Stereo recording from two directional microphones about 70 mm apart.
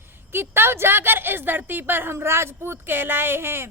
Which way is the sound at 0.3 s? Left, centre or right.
Right.